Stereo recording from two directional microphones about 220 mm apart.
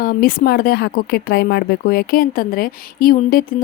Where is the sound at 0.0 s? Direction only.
40° left (ahead or behind).